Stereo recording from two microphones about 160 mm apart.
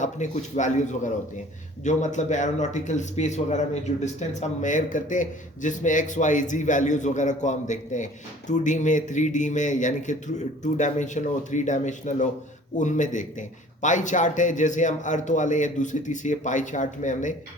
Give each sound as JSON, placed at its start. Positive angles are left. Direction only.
{"t": 0.0, "sound": "a man's voice", "side_deg": 50}